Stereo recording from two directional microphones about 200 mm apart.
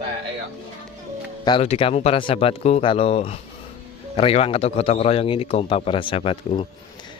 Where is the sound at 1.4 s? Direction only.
30° left (ahead or behind).